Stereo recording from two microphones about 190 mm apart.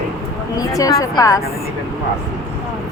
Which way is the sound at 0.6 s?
20° left (ahead or behind).